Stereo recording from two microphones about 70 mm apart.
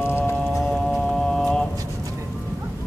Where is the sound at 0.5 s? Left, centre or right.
Centre.